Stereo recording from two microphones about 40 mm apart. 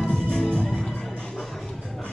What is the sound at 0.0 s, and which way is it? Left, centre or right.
Music, centre.